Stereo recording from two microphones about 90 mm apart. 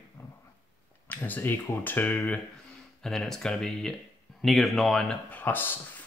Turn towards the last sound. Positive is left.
turn(degrees=20)  # may be behind; listen again after turning